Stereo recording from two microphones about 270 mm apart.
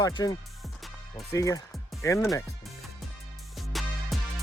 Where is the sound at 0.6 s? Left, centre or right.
Centre.